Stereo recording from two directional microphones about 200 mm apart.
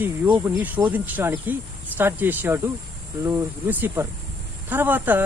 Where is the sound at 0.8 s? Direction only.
10° right (ahead or behind).